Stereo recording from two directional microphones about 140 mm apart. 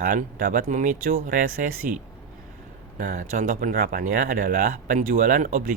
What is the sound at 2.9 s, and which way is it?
Speech, 70° right (ahead or behind).